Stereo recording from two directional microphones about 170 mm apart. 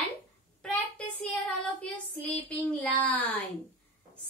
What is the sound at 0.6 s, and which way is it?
Child singing, 10° left (ahead or behind).